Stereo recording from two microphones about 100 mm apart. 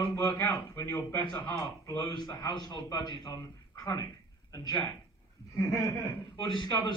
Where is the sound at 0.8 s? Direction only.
20° left (ahead or behind).